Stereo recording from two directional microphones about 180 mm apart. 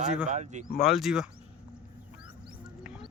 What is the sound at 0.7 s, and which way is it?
Speech, centre (ahead or behind).